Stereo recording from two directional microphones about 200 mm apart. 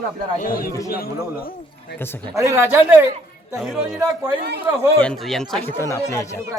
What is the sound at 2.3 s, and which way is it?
Speech, 15° right (ahead or behind).